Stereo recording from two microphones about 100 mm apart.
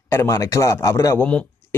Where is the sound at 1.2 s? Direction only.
10° left (ahead or behind).